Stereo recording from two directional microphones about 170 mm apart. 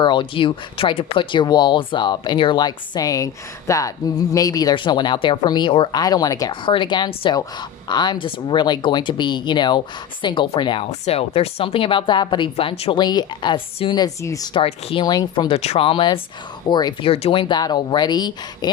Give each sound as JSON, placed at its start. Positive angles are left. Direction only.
{"t": 0.0, "sound": "a woman's voice", "side_deg": 30}
{"t": 15.5, "sound": "a woman's voice", "side_deg": 35}